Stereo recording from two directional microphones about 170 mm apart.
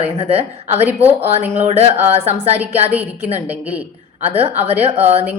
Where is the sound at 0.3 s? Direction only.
35° right (ahead or behind).